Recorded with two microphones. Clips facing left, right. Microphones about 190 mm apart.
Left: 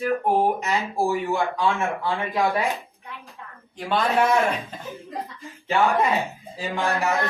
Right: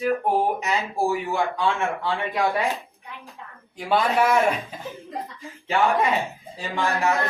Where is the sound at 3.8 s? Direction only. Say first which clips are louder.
Right 1 dB; 5° right (ahead or behind).